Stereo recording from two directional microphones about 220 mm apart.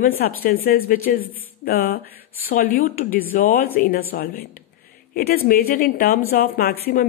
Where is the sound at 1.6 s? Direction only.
45° left (ahead or behind).